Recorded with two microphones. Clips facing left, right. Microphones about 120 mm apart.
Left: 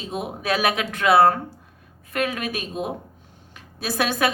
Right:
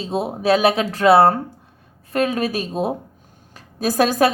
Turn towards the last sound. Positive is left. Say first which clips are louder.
# right 6 dB
turn(degrees=-35)  # may be behind; listen again after turning